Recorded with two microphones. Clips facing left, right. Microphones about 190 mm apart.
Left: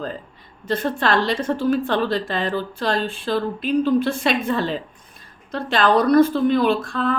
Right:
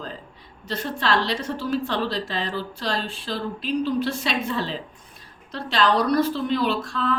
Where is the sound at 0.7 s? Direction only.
50° left (ahead or behind).